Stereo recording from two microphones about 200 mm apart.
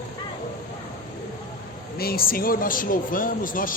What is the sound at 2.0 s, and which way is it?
Speech, 50° left (ahead or behind).